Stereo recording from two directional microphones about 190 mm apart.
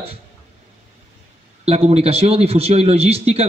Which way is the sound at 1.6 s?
30° right (ahead or behind).